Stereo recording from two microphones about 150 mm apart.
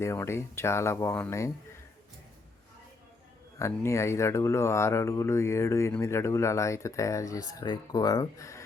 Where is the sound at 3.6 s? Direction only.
20° left (ahead or behind).